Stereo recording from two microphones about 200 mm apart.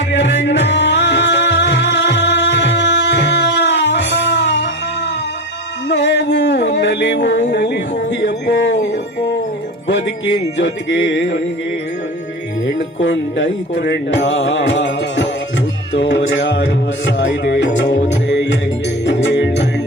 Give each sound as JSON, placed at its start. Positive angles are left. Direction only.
{"t": 0.1, "sound": "music", "side_deg": 60}
{"t": 5.9, "sound": "music", "side_deg": 60}
{"t": 7.5, "sound": "a sound", "side_deg": 60}
{"t": 10.6, "sound": "music", "side_deg": 65}
{"t": 13.0, "sound": "music", "side_deg": 65}